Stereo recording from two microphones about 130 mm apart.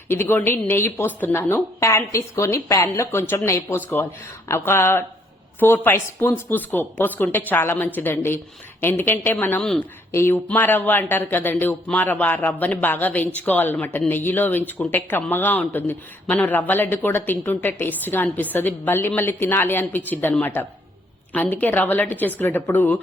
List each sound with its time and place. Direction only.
0.1 s speech: 15° left (ahead or behind)